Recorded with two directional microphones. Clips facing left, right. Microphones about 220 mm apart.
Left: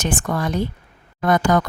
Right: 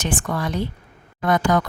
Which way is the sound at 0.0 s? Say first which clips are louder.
Left 2 dB; 45° left (ahead or behind).